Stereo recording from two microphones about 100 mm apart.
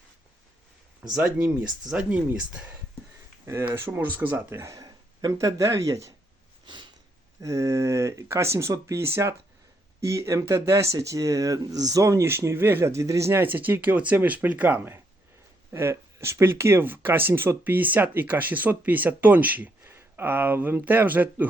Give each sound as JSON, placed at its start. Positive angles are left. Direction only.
{"t": 1.1, "sound": "speech", "side_deg": -15}
{"t": 3.4, "sound": "speech", "side_deg": -30}
{"t": 7.4, "sound": "speech", "side_deg": -35}
{"t": 15.7, "sound": "speech", "side_deg": -25}